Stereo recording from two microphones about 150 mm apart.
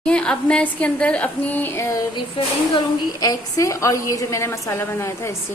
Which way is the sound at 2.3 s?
30° left (ahead or behind).